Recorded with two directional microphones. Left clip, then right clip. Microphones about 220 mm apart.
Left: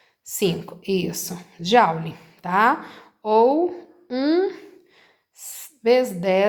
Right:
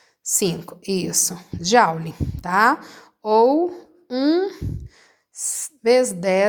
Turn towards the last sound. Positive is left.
turn(degrees=-30)  # may be behind; listen again after turning